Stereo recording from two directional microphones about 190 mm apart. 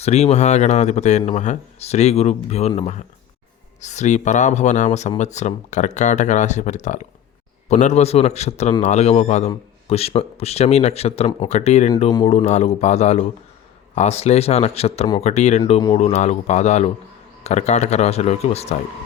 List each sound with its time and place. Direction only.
0.0 s speech: 35° left (ahead or behind)
12.1 s speech: 25° left (ahead or behind)
12.4 s speech: 35° left (ahead or behind)